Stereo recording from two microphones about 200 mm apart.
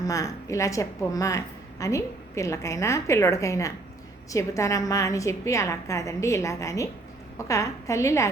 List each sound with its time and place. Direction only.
0.0 s a woman's voice: 15° left (ahead or behind)